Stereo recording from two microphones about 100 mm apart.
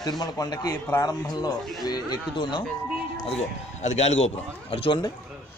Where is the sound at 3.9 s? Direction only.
90° left; by 5.0 s 65° left (ahead or behind).